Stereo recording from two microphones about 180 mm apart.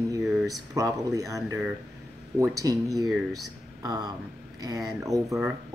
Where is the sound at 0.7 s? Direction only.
20° right (ahead or behind).